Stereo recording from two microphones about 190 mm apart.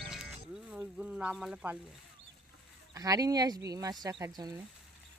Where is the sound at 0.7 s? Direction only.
5° right (ahead or behind).